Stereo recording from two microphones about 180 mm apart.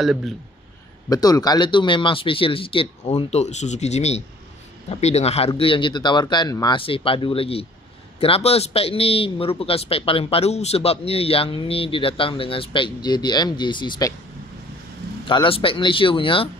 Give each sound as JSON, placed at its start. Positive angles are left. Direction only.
{"t": 0.0, "sound": "speech", "side_deg": 0}
{"t": 1.0, "sound": "a man's voice", "side_deg": 20}
{"t": 15.2, "sound": "speech", "side_deg": 30}